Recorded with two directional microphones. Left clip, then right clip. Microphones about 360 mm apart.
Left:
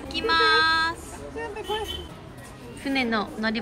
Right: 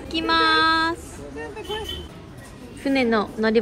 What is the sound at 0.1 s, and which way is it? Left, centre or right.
Child singing, centre.